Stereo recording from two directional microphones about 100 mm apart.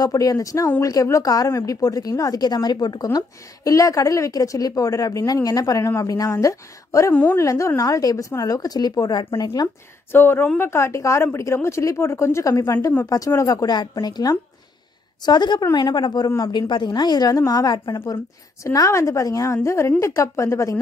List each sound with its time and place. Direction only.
0.0 s a woman's voice: 35° left (ahead or behind)
10.1 s a woman's voice: 20° left (ahead or behind)